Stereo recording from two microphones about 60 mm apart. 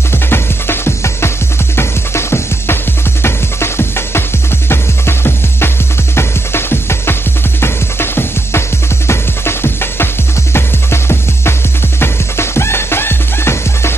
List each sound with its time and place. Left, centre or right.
0.3 s music: left